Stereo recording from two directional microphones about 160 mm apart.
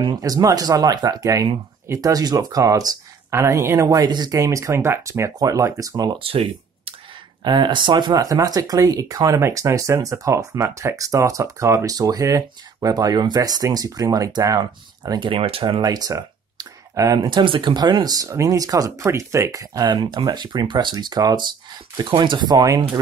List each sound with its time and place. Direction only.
0.0 s speech: 25° right (ahead or behind)